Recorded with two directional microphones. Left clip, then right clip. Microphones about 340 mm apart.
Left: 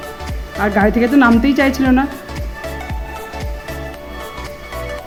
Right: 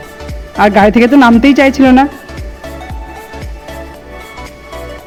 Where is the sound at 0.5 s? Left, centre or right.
Right.